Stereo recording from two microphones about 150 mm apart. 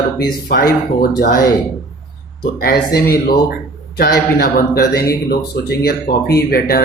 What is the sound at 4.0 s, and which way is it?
Speech, 90° left.